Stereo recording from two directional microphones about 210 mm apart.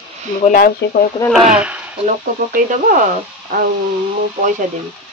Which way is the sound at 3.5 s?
40° right (ahead or behind).